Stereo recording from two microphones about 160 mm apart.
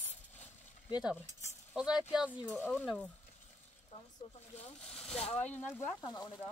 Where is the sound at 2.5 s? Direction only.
10° left (ahead or behind).